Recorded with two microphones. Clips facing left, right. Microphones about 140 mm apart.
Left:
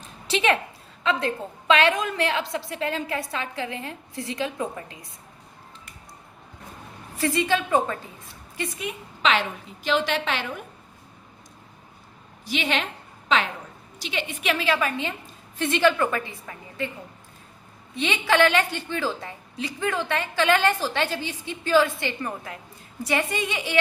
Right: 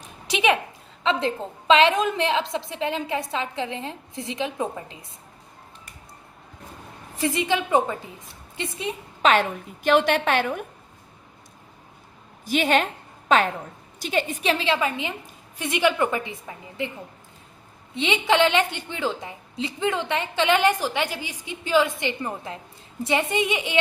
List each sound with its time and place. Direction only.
0.3 s a woman's voice: 15° right (ahead or behind)
1.0 s a woman's voice: 25° right (ahead or behind)
7.2 s a woman's voice: 20° right (ahead or behind)
9.2 s a woman's voice: 50° right (ahead or behind)
12.5 s a woman's voice: 45° right (ahead or behind)
14.5 s a woman's voice: 25° right (ahead or behind)
17.9 s a woman's voice: 20° right (ahead or behind)